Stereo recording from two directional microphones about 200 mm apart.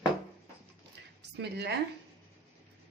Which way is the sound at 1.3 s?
55° right (ahead or behind).